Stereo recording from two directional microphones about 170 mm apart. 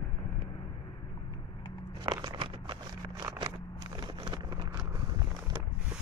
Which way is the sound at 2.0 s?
30° right (ahead or behind).